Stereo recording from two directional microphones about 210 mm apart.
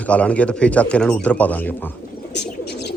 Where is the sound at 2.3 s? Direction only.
50° left (ahead or behind).